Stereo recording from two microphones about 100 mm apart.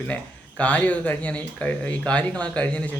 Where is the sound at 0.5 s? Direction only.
15° left (ahead or behind).